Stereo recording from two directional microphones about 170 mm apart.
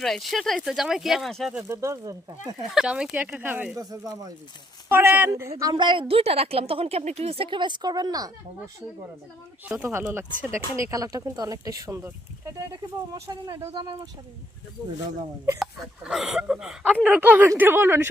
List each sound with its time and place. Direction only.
0.0 s speech: centre (ahead or behind)
1.6 s speech: 15° right (ahead or behind)
2.7 s a woman's voice: 5° right (ahead or behind); by 8.3 s 20° right (ahead or behind)
9.6 s speech: 10° right (ahead or behind); by 14.1 s 25° right (ahead or behind)
15.5 s speech: 5° right (ahead or behind)